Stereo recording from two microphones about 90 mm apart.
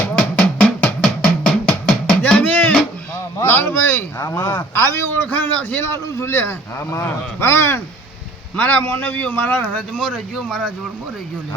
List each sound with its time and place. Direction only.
0.0 s music: 15° left (ahead or behind)
3.4 s a sound: 25° left (ahead or behind)
4.3 s a man's voice: 25° left (ahead or behind)
5.8 s a man's voice: 30° left (ahead or behind)
8.5 s a man's voice: 20° left (ahead or behind)
10.3 s speech: 5° left (ahead or behind)